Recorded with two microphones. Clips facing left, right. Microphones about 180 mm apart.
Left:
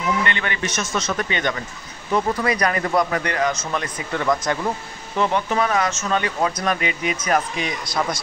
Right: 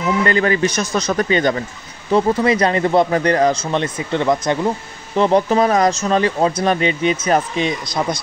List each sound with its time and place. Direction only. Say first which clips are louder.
0.2 s a man's voice: right 9 dB; 35° right (ahead or behind)
5.1 s speech: right 7 dB; 35° right (ahead or behind)